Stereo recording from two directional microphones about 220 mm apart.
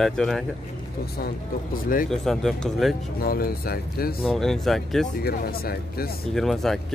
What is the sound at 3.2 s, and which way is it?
Speech, 45° left (ahead or behind).